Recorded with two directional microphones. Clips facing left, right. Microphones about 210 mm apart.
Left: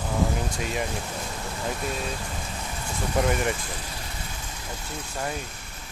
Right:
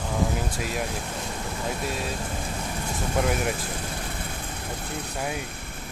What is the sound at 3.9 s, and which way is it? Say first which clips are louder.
Vehicle: right 4 dB; 55° right (ahead or behind).